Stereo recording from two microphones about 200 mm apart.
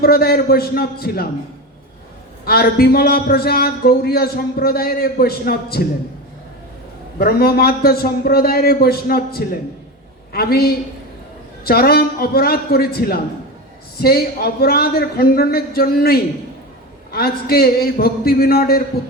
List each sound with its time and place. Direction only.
0.0 s a man's voice: 50° left (ahead or behind)
2.4 s a man's voice: 50° left (ahead or behind)
7.2 s a man's voice: 50° left (ahead or behind)